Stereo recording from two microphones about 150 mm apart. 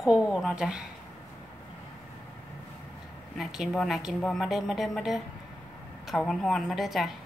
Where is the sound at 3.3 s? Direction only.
Centre (ahead or behind).